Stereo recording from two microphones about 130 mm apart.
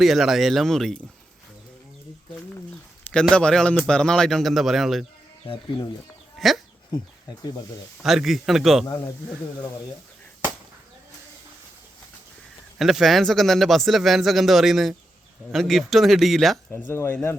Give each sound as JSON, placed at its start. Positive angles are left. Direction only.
{"t": 0.0, "sound": "speech", "side_deg": 0}
{"t": 3.1, "sound": "speech", "side_deg": 5}
{"t": 6.4, "sound": "speech", "side_deg": 0}
{"t": 8.0, "sound": "speech", "side_deg": 0}
{"t": 12.8, "sound": "speech", "side_deg": 0}
{"t": 16.9, "sound": "speech", "side_deg": 15}